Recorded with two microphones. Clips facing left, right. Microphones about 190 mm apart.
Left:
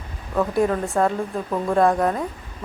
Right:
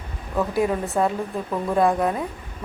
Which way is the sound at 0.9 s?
5° right (ahead or behind).